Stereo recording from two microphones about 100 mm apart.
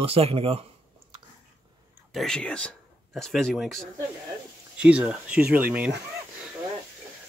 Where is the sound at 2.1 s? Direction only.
5° left (ahead or behind).